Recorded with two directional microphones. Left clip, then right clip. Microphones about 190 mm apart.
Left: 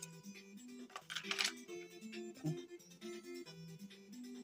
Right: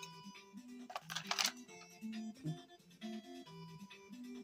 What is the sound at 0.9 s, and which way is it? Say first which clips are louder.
Music: right 2 dB; 25° right (ahead or behind).